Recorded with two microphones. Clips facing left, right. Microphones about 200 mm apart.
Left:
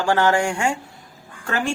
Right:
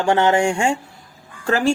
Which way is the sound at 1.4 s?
35° right (ahead or behind).